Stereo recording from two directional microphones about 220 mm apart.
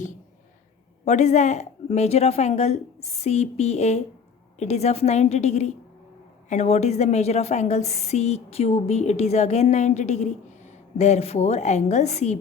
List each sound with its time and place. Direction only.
1.0 s a woman's voice: 30° left (ahead or behind)